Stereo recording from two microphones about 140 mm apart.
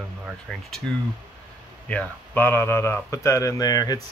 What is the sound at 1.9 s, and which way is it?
Speech, 15° left (ahead or behind).